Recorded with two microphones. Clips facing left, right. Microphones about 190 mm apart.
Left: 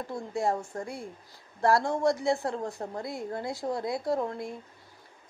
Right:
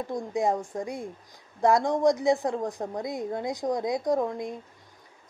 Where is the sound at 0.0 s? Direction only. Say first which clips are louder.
Right 3 dB; 15° right (ahead or behind).